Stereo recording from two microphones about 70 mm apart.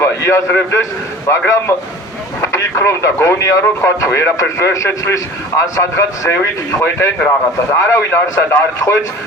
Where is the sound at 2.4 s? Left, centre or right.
Left.